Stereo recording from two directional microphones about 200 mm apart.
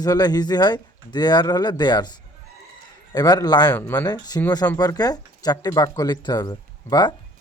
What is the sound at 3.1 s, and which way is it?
Speech, 20° left (ahead or behind).